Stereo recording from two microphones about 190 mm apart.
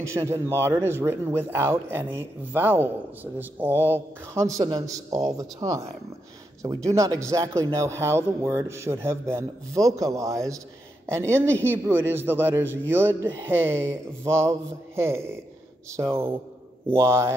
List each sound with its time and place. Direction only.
0.0 s speech: 15° right (ahead or behind)